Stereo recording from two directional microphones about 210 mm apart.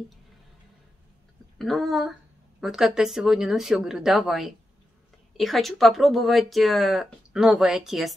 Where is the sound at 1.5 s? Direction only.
Centre (ahead or behind).